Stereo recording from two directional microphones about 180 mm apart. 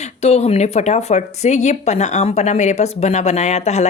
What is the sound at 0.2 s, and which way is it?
A woman's voice, 35° left (ahead or behind).